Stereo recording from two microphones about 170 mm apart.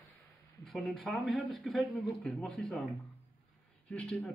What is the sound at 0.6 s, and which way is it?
Speech, centre (ahead or behind).